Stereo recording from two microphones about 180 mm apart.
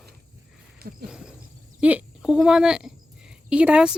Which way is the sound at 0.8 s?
60° right (ahead or behind).